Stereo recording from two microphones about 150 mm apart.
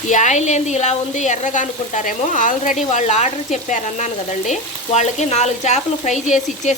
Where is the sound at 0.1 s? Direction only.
55° left (ahead or behind).